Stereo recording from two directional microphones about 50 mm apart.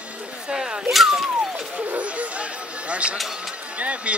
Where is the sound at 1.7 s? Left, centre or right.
Right.